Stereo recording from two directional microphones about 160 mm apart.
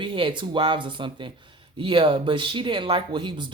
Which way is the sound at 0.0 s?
30° right (ahead or behind).